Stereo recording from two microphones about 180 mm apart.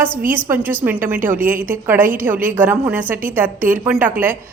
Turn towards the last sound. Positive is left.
turn(degrees=-10)  # may be behind; listen again after turning